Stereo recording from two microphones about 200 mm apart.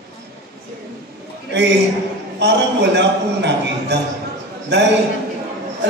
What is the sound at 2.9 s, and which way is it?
A man's voice, 60° right (ahead or behind).